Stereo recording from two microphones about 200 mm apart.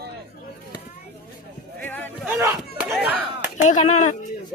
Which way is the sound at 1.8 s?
10° left (ahead or behind).